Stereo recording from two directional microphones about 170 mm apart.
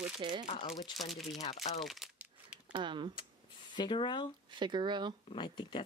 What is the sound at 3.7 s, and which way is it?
Speech, 25° left (ahead or behind).